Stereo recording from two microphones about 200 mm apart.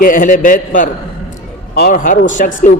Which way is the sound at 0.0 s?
40° left (ahead or behind).